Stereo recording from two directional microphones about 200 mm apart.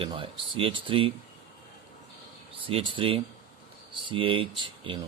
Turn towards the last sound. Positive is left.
turn(degrees=-25)  # may be behind; listen again after turning